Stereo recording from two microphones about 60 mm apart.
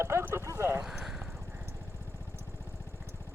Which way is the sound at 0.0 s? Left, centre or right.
Right.